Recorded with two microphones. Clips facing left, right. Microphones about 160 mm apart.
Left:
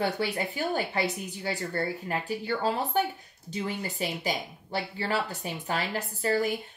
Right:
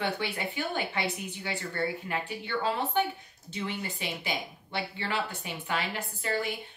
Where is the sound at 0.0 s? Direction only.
40° left (ahead or behind).